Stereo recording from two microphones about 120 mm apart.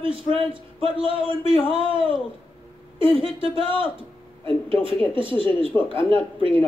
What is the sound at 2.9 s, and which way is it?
A man's voice, 45° right (ahead or behind).